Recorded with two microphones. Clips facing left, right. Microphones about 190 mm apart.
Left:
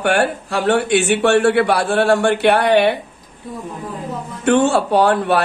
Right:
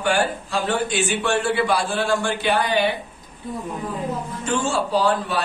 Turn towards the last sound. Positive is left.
turn(degrees=65)  # may be behind; listen again after turning